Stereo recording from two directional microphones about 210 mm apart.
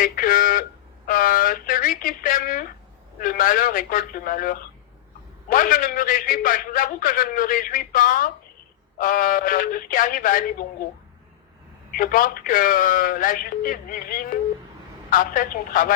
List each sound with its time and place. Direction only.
0.0 s a man's voice: 40° left (ahead or behind)
11.9 s a man's voice: 40° left (ahead or behind)